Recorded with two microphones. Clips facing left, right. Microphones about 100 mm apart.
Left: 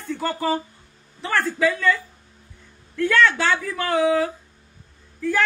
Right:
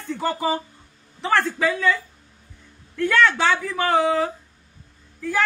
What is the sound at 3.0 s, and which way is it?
Speech, 20° right (ahead or behind).